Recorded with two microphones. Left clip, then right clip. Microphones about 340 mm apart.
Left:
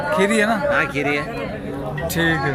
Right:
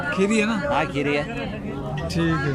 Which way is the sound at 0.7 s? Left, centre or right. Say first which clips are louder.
Left 3 dB; right.